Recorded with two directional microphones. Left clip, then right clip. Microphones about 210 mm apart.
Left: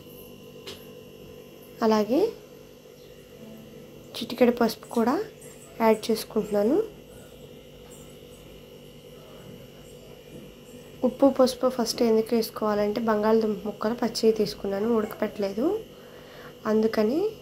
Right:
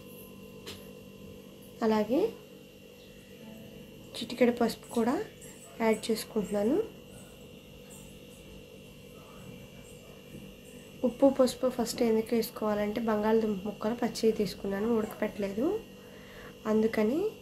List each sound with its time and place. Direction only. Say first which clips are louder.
1.8 s a woman's voice: left 5 dB; 5° left (ahead or behind)
4.1 s speech: left 5 dB; 5° left (ahead or behind)
11.0 s speech: left 4 dB; 5° left (ahead or behind)